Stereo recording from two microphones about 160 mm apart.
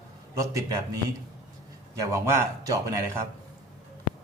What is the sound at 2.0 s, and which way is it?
Speech, 15° right (ahead or behind).